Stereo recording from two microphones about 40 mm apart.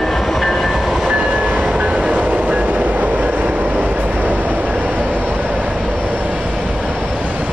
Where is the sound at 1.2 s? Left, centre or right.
Right.